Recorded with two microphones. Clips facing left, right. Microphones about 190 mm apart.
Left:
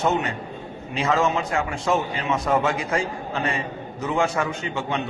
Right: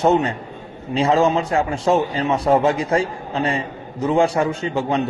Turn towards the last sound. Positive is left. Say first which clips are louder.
# right 6 dB
turn(degrees=-35)  # may be behind; listen again after turning